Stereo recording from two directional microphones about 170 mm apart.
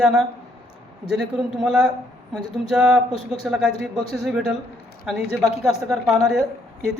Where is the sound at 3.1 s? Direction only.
35° left (ahead or behind).